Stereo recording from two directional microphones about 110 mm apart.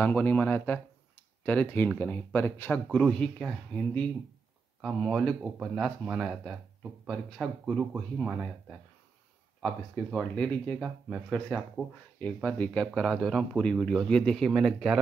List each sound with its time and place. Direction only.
0.0 s speech: 15° left (ahead or behind)
2.9 s speech: 5° left (ahead or behind)